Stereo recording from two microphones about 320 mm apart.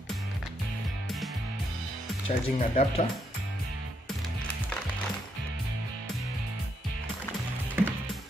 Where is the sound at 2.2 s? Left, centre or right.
Centre.